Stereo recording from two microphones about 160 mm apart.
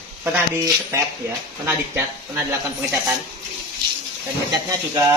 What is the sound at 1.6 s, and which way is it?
Speech, 15° right (ahead or behind).